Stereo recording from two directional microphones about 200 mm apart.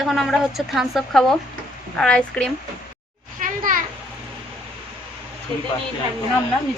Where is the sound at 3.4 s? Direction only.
40° right (ahead or behind).